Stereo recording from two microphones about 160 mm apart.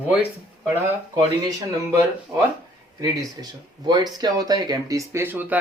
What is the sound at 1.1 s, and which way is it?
Speech, 20° right (ahead or behind).